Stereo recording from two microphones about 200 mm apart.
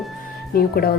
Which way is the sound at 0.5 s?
50° left (ahead or behind).